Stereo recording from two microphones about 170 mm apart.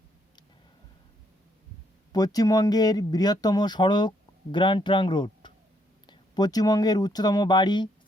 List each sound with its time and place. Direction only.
2.1 s speech: 20° left (ahead or behind)